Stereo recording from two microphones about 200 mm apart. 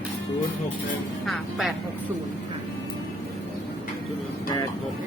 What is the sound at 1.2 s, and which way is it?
Speech, centre (ahead or behind).